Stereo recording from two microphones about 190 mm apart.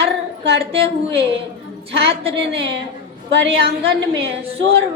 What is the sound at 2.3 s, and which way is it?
Speech, 65° right (ahead or behind).